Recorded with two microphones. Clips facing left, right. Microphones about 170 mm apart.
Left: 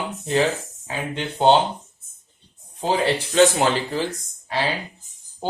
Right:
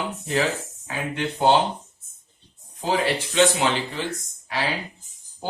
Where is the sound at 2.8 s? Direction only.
30° left (ahead or behind).